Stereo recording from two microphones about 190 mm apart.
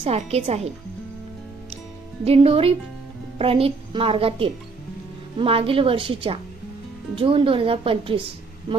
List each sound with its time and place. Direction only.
0.0 s speech: 35° right (ahead or behind)
2.2 s a woman's voice: 30° right (ahead or behind)